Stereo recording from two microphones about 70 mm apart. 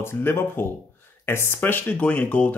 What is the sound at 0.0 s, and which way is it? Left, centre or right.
Speech, left.